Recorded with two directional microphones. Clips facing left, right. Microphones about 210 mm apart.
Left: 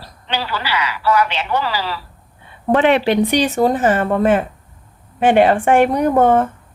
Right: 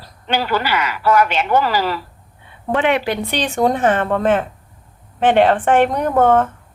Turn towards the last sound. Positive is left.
turn(degrees=10)  # may be behind; listen again after turning